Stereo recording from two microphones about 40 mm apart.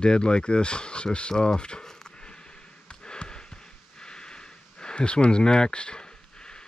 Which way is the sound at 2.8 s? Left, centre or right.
Left.